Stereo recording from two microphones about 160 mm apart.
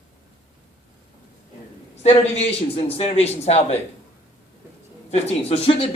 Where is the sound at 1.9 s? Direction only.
40° left (ahead or behind).